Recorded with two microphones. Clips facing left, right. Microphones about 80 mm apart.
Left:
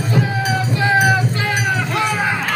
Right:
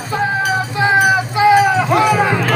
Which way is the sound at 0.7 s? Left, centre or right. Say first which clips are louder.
Right 2 dB; right.